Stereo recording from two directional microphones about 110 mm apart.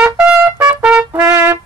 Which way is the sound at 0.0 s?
15° right (ahead or behind).